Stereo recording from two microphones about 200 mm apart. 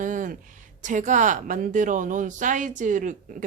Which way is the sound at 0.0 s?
40° right (ahead or behind).